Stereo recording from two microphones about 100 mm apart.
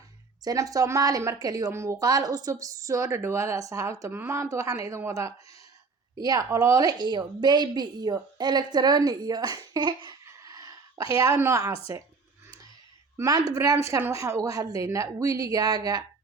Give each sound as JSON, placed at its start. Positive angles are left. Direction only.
{"t": 0.4, "sound": "a woman's voice", "side_deg": -35}
{"t": 6.1, "sound": "speech", "side_deg": -40}
{"t": 10.2, "sound": "a sound", "side_deg": -35}
{"t": 13.1, "sound": "a woman's voice", "side_deg": -35}